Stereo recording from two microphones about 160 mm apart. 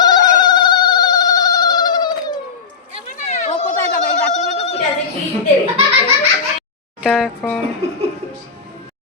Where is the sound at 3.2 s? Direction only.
45° left (ahead or behind).